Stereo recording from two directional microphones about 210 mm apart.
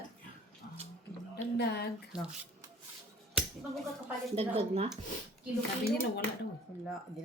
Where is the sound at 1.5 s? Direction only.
50° left (ahead or behind).